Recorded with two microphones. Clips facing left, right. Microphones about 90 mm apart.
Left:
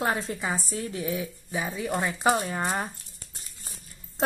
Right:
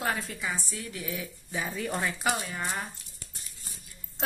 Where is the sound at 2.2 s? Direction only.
35° left (ahead or behind).